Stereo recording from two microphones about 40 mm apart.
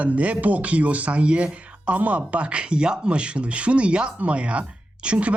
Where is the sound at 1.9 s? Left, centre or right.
Right.